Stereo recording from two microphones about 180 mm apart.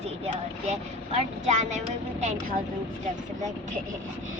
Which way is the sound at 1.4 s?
40° right (ahead or behind).